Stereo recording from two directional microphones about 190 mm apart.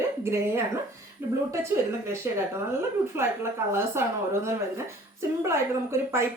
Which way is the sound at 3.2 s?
15° right (ahead or behind).